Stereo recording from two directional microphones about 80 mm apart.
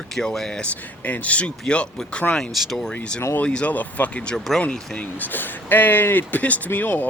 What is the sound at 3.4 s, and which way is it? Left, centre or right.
Speech, centre.